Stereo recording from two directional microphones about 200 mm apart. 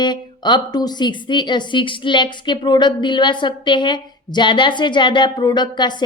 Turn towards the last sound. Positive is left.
turn(degrees=20)  # may be behind; listen again after turning